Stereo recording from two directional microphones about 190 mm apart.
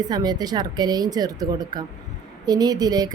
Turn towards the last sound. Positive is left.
turn(degrees=-20)  # may be behind; listen again after turning